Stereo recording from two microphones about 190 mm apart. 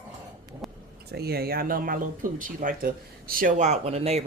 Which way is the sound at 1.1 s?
55° right (ahead or behind).